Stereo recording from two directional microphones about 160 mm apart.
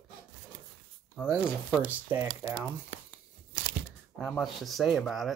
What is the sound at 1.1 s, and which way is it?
Speech, 5° right (ahead or behind).